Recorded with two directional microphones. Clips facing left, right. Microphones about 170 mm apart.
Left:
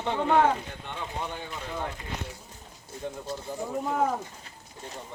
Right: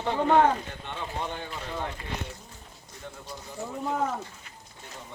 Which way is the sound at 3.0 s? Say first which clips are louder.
Left 7 dB; 15° left (ahead or behind).